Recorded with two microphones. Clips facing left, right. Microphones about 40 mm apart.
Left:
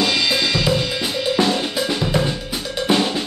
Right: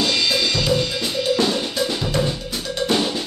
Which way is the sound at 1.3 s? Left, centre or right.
Centre.